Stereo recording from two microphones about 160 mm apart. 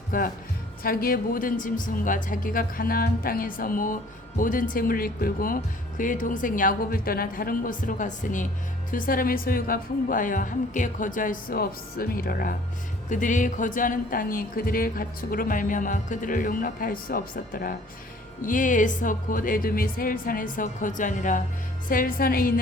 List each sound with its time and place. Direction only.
0.1 s speech: 60° left (ahead or behind)
13.1 s speech: 50° left (ahead or behind)